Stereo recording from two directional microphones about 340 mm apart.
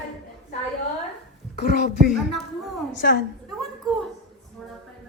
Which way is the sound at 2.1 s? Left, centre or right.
Centre.